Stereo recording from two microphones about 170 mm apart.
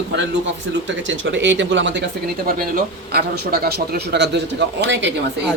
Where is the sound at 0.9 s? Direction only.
90° right.